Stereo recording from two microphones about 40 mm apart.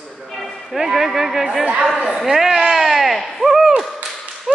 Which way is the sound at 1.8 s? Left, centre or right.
Centre.